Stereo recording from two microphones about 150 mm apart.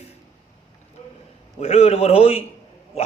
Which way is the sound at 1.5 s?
45° left (ahead or behind).